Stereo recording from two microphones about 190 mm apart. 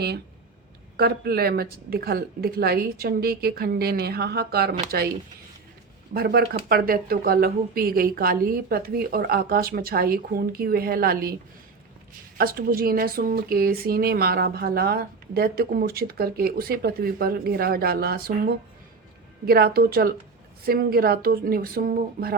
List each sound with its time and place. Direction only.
0.9 s speech: 55° right (ahead or behind)
6.1 s speech: 55° right (ahead or behind)
12.4 s speech: 50° right (ahead or behind)